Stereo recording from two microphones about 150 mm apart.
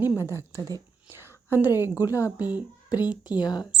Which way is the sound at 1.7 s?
20° left (ahead or behind).